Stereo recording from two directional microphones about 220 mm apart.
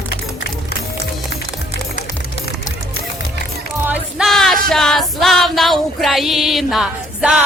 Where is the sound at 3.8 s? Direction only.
5° right (ahead or behind).